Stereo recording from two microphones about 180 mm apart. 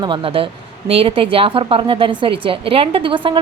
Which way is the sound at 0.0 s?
30° right (ahead or behind).